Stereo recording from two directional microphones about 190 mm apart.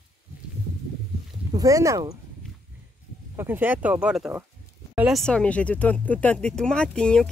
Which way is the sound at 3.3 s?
10° right (ahead or behind).